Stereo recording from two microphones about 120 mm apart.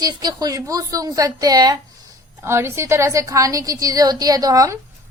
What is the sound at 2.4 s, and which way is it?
A woman's voice, 20° right (ahead or behind).